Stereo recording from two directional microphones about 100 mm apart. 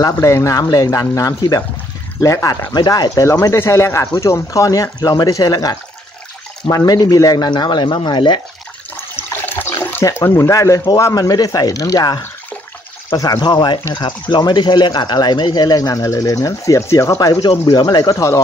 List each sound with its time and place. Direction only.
0.0 s speech: 30° left (ahead or behind)
2.7 s speech: 45° left (ahead or behind)
3.5 s speech: 25° left (ahead or behind); by 8.4 s 50° left (ahead or behind)
8.9 s water: 20° left (ahead or behind)
10.9 s speech: 35° left (ahead or behind)
13.4 s speech: 50° left (ahead or behind); by 18.4 s 30° left (ahead or behind)